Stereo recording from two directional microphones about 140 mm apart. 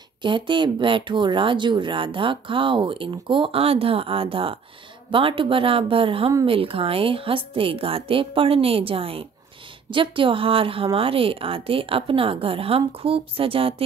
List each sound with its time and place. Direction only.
0.2 s speech: 35° right (ahead or behind)